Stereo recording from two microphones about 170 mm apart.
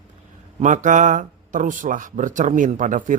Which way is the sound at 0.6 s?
45° right (ahead or behind).